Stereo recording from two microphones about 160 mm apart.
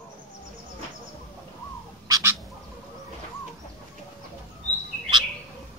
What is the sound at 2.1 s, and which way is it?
Bird, 20° right (ahead or behind).